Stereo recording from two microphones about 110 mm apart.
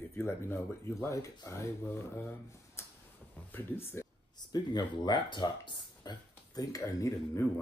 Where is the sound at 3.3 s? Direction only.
20° left (ahead or behind).